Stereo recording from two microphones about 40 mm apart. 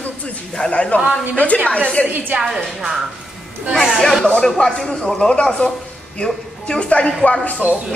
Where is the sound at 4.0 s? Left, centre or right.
Centre; by 7.1 s left.